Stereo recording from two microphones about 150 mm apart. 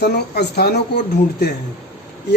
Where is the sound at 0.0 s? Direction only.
90° left.